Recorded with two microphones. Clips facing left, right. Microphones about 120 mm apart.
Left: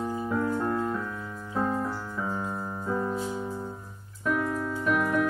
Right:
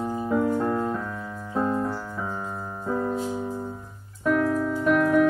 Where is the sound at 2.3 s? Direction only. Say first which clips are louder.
Even; 20° right (ahead or behind).